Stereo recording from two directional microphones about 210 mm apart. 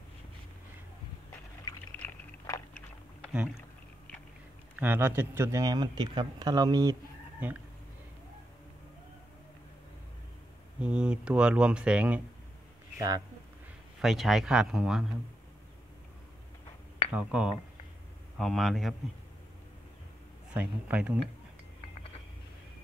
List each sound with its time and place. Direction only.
2.0 s a sound: 10° left (ahead or behind)
4.7 s speech: 10° right (ahead or behind)
10.8 s speech: 5° right (ahead or behind)
14.0 s speech: centre (ahead or behind)
17.1 s speech: 5° right (ahead or behind)
20.5 s speech: 5° right (ahead or behind)